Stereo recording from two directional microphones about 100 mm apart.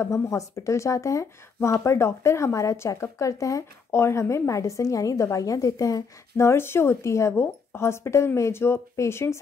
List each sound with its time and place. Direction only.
0.0 s speech: 30° left (ahead or behind)